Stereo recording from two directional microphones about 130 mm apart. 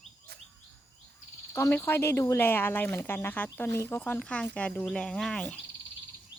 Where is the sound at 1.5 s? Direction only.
15° left (ahead or behind).